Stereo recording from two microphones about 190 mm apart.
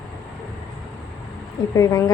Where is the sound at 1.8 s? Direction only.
15° left (ahead or behind).